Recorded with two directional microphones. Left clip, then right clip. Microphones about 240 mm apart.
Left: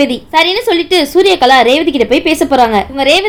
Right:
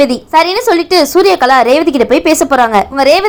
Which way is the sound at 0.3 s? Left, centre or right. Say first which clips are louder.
Right 1 dB; centre.